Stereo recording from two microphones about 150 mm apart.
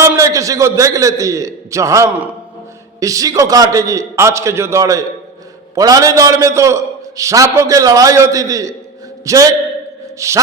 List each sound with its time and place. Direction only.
0.0 s a man's voice: 20° right (ahead or behind)